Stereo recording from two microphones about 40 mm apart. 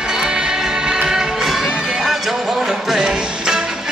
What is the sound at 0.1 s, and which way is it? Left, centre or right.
Music, centre.